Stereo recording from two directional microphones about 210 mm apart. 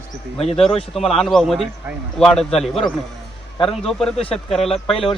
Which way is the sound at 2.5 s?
30° left (ahead or behind).